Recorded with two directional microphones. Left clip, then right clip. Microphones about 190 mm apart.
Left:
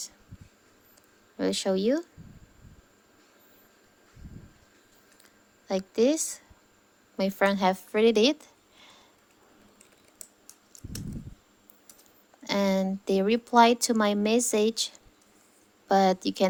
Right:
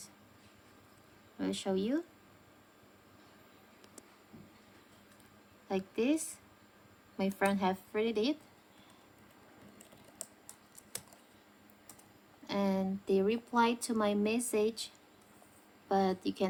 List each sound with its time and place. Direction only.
1.4 s speech: 35° left (ahead or behind)
5.6 s speech: 35° left (ahead or behind)
12.5 s speech: 40° left (ahead or behind)